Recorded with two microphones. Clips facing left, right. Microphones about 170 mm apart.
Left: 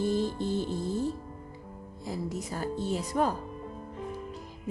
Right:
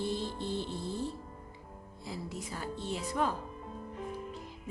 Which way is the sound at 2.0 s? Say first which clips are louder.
Left 6 dB; 40° left (ahead or behind).